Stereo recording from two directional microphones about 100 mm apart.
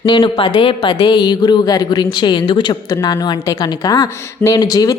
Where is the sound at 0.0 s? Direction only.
50° left (ahead or behind).